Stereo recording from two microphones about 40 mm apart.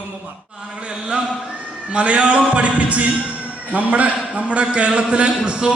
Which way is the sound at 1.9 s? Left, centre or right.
Right.